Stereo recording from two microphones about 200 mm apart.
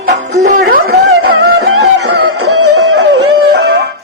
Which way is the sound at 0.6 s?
55° right (ahead or behind).